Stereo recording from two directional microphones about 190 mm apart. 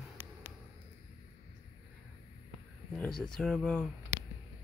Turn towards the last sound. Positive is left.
turn(degrees=5)  # may be behind; listen again after turning